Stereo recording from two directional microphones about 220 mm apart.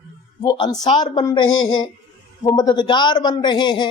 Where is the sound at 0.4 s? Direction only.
15° left (ahead or behind).